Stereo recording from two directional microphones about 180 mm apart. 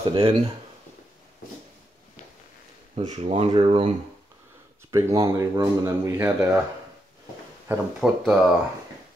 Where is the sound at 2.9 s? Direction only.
35° right (ahead or behind).